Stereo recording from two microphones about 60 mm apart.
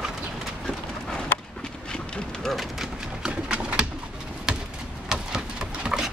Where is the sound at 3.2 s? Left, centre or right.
Centre.